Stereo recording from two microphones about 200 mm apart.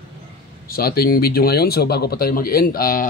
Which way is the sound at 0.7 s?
50° left (ahead or behind).